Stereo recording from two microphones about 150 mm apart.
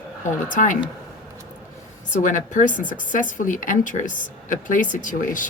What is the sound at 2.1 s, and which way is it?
Speech, 60° left (ahead or behind).